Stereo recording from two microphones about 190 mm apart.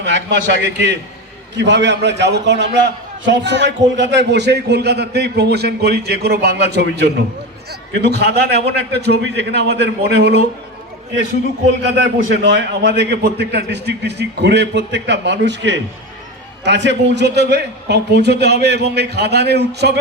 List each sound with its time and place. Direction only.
0.0 s a man's voice: 70° right (ahead or behind)
12.3 s a man's voice: 70° right (ahead or behind)